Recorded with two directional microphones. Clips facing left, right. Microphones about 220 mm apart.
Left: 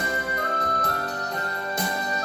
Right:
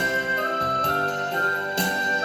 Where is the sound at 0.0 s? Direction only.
25° right (ahead or behind).